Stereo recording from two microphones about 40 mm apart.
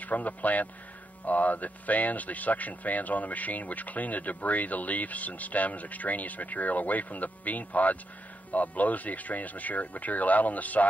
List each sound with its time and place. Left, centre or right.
0.0 s speech: left